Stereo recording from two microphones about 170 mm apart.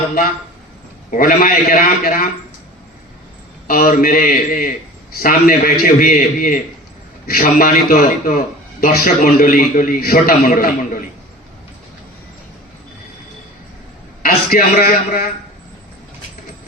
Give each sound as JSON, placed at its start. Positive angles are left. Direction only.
{"t": 1.1, "sound": "a man's voice", "side_deg": 55}
{"t": 3.7, "sound": "a man's voice", "side_deg": 60}
{"t": 14.2, "sound": "a man's voice", "side_deg": 60}